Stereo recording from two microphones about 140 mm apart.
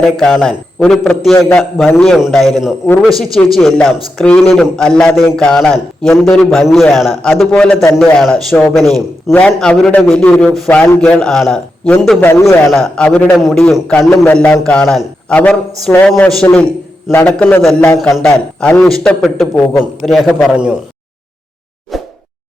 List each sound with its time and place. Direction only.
0.0 s a man's voice: centre (ahead or behind)
2.0 s a man's voice: centre (ahead or behind)
12.2 s a man's voice: 20° left (ahead or behind)
12.8 s a man's voice: 5° left (ahead or behind)
17.6 s a man's voice: centre (ahead or behind)
17.8 s a man's voice: 20° left (ahead or behind)
18.1 s a man's voice: 5° left (ahead or behind)
20.5 s speech: 5° right (ahead or behind)
21.9 s a sound: centre (ahead or behind)